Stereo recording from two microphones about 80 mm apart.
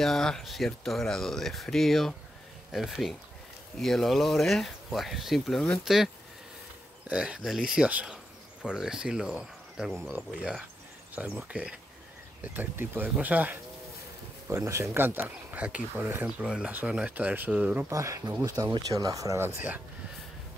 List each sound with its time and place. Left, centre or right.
0.0 s speech: centre
7.1 s speech: centre
11.4 s speech: centre
14.5 s speech: right
16.4 s speech: centre
17.8 s speech: right
18.4 s speech: right
19.3 s speech: right